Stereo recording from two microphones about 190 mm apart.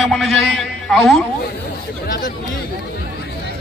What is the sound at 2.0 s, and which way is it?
Speech, 50° left (ahead or behind).